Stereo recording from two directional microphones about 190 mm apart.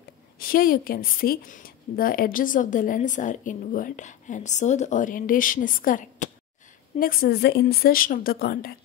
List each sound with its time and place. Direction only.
0.4 s a woman's voice: 50° left (ahead or behind)